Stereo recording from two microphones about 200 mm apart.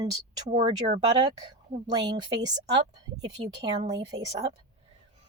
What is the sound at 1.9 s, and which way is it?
A woman's voice, 20° right (ahead or behind).